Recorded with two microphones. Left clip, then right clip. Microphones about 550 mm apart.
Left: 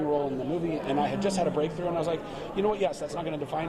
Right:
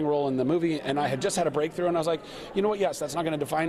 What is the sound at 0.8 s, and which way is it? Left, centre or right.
A man's voice, right.